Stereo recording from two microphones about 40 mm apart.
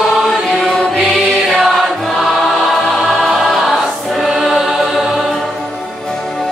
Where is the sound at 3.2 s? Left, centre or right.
Centre.